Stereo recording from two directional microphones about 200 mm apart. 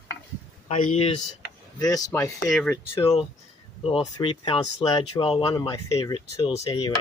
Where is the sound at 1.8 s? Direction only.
20° left (ahead or behind).